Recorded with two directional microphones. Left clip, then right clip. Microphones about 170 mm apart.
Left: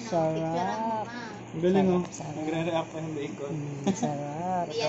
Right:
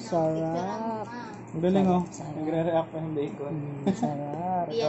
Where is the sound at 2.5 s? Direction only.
45° right (ahead or behind).